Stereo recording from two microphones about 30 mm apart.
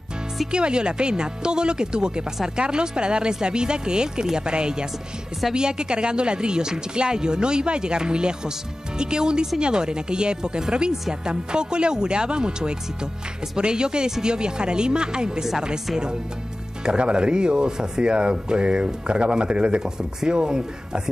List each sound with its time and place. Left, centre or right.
0.5 s speech: right
16.8 s speech: right